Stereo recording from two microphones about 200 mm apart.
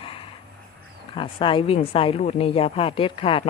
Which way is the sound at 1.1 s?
25° left (ahead or behind).